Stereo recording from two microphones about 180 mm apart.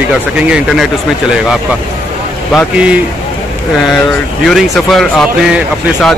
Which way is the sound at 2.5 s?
5° right (ahead or behind).